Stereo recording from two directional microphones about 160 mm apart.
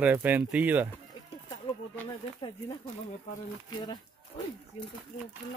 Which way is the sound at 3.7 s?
25° left (ahead or behind).